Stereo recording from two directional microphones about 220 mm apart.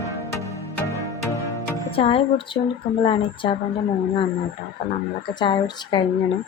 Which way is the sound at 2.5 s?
25° left (ahead or behind).